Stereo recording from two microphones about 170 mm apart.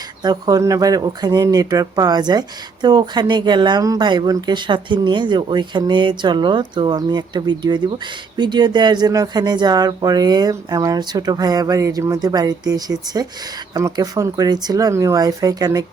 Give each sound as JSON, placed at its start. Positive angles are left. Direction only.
{"t": 0.2, "sound": "speech", "side_deg": -25}